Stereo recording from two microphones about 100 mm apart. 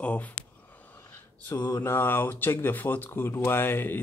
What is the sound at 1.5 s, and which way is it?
Mantra, 45° left (ahead or behind).